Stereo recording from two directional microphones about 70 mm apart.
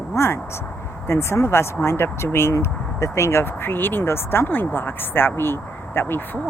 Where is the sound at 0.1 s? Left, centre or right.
Left.